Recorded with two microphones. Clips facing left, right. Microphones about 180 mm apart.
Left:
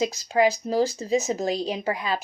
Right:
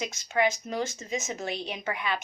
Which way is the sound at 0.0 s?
35° left (ahead or behind).